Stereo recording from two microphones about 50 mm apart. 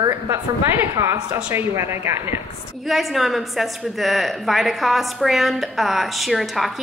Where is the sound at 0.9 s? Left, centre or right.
Right.